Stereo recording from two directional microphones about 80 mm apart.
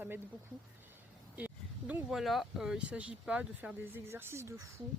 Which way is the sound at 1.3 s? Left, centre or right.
Centre.